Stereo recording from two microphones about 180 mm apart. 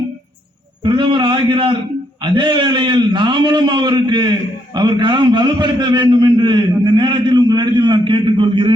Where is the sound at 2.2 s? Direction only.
25° right (ahead or behind).